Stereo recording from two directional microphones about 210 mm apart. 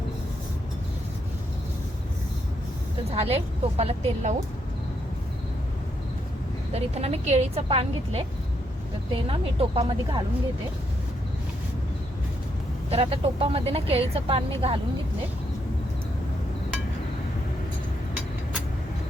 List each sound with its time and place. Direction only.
3.1 s speech: 30° right (ahead or behind)
6.7 s speech: 30° right (ahead or behind)
9.2 s speech: 25° right (ahead or behind)
12.9 s speech: 25° right (ahead or behind)